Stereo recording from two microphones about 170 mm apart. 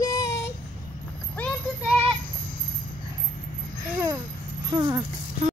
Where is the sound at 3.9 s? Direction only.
15° right (ahead or behind).